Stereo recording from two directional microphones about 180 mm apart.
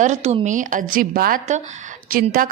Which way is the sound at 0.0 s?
40° right (ahead or behind).